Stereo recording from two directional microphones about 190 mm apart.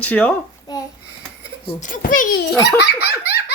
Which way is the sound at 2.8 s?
60° left (ahead or behind).